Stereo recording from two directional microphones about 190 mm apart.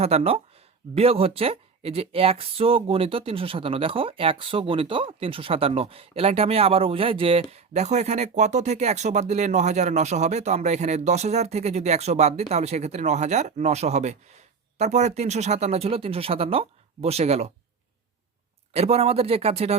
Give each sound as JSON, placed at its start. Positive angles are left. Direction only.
{"t": 0.0, "sound": "speech", "side_deg": -30}
{"t": 18.7, "sound": "speech", "side_deg": -35}